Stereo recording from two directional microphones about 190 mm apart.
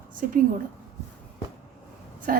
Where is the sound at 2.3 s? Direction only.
50° right (ahead or behind).